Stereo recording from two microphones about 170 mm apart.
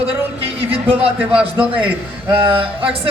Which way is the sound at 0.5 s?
35° right (ahead or behind).